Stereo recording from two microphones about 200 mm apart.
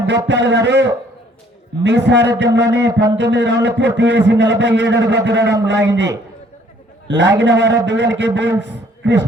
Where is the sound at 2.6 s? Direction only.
15° right (ahead or behind).